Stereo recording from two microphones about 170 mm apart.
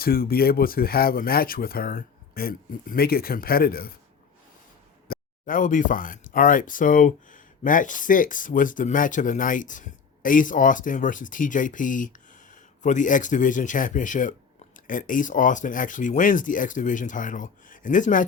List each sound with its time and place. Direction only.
0.0 s speech: 60° left (ahead or behind)
5.0 s speech: 55° left (ahead or behind)